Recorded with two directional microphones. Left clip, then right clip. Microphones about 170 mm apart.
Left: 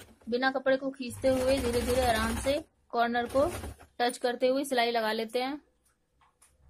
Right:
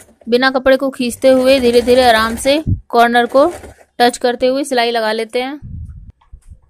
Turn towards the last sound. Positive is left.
turn(degrees=-25)  # may be behind; listen again after turning